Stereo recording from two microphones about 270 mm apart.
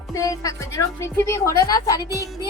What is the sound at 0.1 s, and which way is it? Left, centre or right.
Speech, centre.